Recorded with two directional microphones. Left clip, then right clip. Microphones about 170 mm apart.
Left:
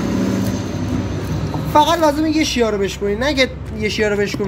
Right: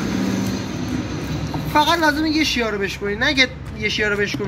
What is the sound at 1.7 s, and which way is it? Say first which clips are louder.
A woman's voice: left 3 dB; 25° left (ahead or behind).